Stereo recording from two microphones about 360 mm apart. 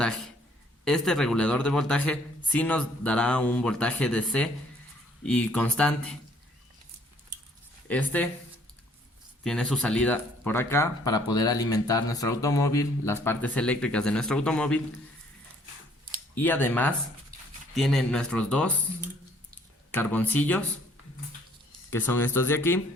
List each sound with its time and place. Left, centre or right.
0.0 s a man's voice: centre
7.9 s speech: centre
9.4 s speech: centre
16.3 s speech: centre
17.3 s dog: right
17.7 s speech: centre
19.9 s speech: centre
21.8 s speech: centre